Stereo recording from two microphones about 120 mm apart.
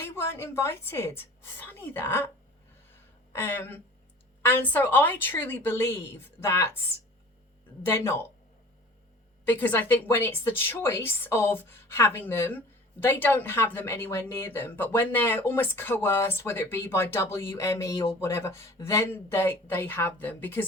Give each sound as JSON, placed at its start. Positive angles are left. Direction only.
{"t": 0.0, "sound": "a woman's voice", "side_deg": 20}
{"t": 3.3, "sound": "a woman's voice", "side_deg": 20}
{"t": 7.9, "sound": "a woman's voice", "side_deg": 20}
{"t": 9.5, "sound": "a woman's voice", "side_deg": 15}